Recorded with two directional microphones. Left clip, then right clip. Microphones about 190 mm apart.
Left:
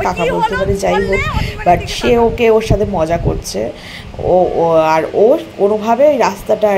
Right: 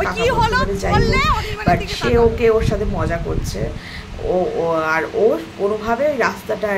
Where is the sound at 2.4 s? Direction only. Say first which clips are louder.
Left 5 dB; 25° left (ahead or behind).